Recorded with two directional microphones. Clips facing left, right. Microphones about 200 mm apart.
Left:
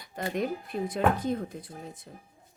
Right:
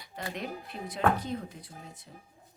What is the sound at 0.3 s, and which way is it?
Speech, 50° left (ahead or behind).